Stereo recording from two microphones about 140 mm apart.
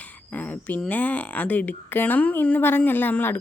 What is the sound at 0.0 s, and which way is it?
Speech, 10° left (ahead or behind).